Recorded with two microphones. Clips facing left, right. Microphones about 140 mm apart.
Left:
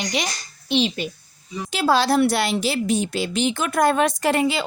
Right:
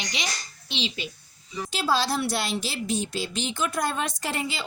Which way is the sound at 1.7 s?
65° left (ahead or behind).